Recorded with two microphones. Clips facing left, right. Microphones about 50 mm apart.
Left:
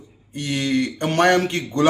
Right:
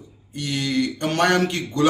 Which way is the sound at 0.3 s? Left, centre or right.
Left.